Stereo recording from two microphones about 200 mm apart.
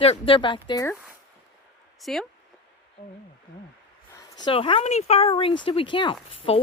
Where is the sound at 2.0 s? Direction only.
Centre (ahead or behind).